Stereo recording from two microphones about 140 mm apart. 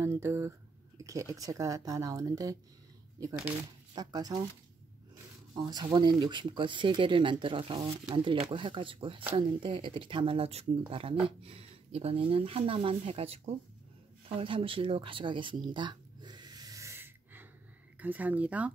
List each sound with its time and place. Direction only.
0.0 s a sound: 20° right (ahead or behind)
1.3 s speech: 25° right (ahead or behind)
3.9 s speech: 30° right (ahead or behind)
5.5 s speech: 30° right (ahead or behind); by 13.6 s 45° right (ahead or behind)
14.3 s a sound: 40° right (ahead or behind); by 17.5 s 15° right (ahead or behind)
17.9 s speech: 10° right (ahead or behind)